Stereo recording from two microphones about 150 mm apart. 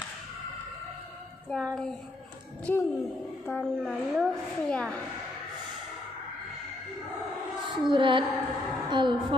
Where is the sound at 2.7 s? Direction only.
10° left (ahead or behind).